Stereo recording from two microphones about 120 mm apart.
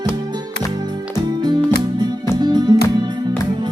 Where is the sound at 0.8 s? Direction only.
35° right (ahead or behind).